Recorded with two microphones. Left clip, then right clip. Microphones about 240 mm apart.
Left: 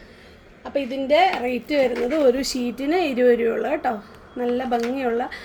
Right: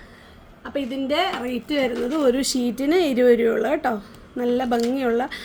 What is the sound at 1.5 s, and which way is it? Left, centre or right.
Speech, right.